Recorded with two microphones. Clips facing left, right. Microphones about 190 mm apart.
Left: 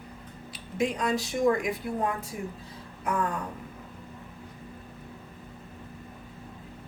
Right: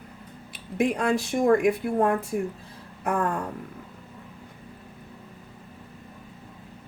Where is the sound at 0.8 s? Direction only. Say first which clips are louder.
Right 4 dB; 55° right (ahead or behind).